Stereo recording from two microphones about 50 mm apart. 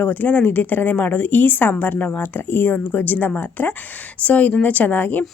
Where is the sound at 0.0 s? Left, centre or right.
Left.